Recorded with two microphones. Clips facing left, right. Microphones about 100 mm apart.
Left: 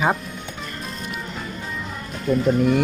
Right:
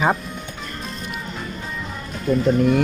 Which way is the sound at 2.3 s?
5° left (ahead or behind).